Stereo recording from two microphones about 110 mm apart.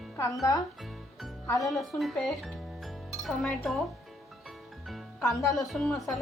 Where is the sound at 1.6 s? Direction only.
Centre (ahead or behind).